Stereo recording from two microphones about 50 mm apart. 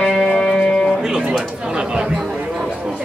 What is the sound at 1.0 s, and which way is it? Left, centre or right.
Music, centre.